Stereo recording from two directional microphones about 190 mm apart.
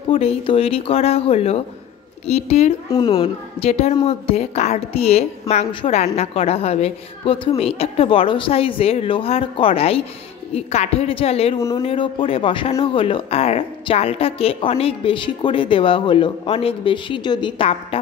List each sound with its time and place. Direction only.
0.1 s a woman's voice: 30° left (ahead or behind)